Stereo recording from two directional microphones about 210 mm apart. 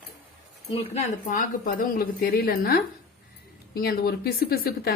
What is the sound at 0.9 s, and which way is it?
A woman's voice, 40° left (ahead or behind).